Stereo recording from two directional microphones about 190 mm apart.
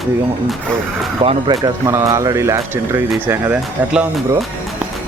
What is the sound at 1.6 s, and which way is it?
Speech, 15° right (ahead or behind).